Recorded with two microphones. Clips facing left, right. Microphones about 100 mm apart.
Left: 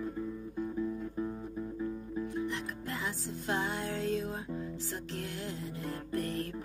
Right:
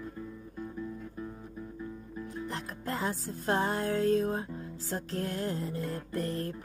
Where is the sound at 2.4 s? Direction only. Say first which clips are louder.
Right 1 dB; 40° right (ahead or behind).